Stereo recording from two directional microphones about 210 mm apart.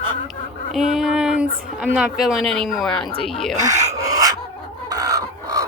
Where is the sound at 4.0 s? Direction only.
15° right (ahead or behind).